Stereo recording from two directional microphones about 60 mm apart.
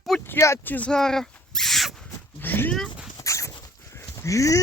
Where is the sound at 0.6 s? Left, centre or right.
Left.